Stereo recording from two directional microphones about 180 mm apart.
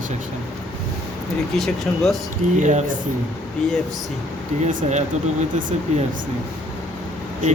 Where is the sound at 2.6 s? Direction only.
40° right (ahead or behind).